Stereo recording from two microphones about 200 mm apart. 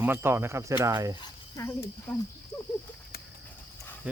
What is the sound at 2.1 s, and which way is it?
Speech, 10° left (ahead or behind).